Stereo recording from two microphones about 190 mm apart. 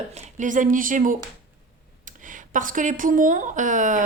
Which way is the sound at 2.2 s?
45° right (ahead or behind).